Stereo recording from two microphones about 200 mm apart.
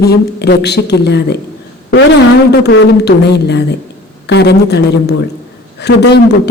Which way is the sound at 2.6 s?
60° left (ahead or behind).